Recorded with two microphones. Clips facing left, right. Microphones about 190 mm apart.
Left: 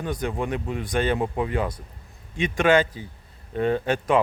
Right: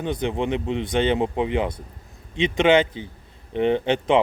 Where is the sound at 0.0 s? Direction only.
25° right (ahead or behind).